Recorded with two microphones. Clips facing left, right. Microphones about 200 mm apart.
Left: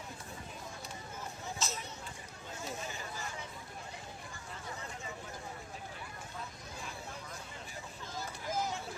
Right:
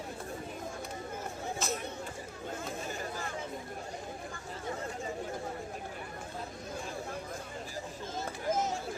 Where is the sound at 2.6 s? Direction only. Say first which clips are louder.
Right 1 dB; 50° right (ahead or behind).